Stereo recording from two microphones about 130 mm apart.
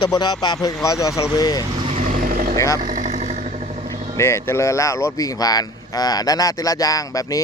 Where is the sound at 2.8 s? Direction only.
70° right (ahead or behind).